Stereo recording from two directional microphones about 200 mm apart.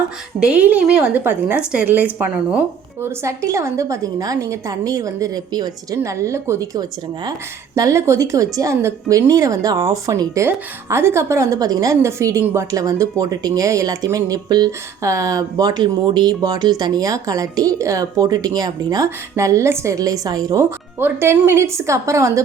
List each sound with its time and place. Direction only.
0.3 s speech: 5° right (ahead or behind)